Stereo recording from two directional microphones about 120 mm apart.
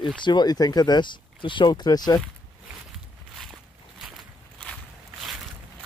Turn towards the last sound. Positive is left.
turn(degrees=0)  # may be behind; listen again after turning